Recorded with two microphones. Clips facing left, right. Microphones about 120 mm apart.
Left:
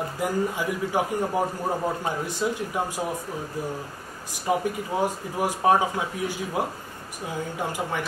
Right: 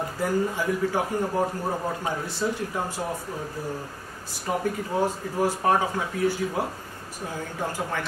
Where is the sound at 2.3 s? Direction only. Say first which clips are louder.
Left 1 dB; 15° left (ahead or behind).